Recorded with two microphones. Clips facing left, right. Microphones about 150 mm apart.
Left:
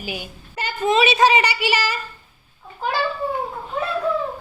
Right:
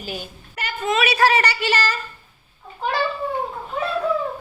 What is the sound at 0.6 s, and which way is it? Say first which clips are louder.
A woman's voice: left 4 dB; 30° left (ahead or behind).